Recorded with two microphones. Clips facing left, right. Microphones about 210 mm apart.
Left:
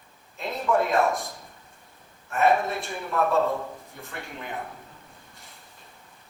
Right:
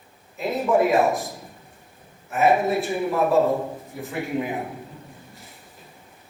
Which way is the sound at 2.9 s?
15° right (ahead or behind).